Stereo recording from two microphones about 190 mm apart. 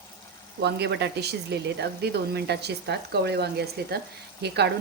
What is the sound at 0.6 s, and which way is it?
Speech, 60° right (ahead or behind).